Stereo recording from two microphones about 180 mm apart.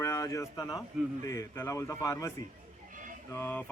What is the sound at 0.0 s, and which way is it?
Speech, 20° left (ahead or behind).